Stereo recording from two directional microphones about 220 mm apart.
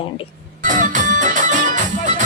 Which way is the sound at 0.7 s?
35° right (ahead or behind).